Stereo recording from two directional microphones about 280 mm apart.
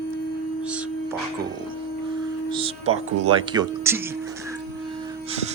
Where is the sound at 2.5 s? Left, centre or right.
Centre.